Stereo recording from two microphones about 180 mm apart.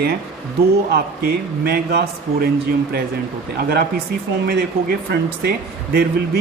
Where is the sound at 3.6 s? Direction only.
60° right (ahead or behind).